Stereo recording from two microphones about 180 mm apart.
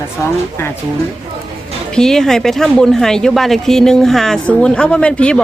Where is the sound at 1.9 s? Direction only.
5° left (ahead or behind).